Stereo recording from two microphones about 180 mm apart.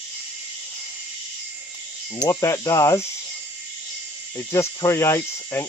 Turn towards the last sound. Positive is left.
turn(degrees=15)  # may be behind; listen again after turning